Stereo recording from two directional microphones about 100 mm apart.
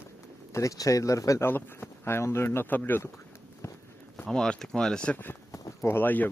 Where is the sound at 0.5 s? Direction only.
35° left (ahead or behind).